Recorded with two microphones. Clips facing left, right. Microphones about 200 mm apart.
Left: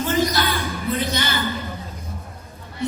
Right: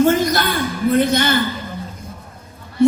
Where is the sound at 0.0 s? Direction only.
50° right (ahead or behind).